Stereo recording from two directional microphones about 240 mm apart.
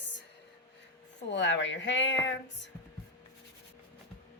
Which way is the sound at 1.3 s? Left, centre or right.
Left.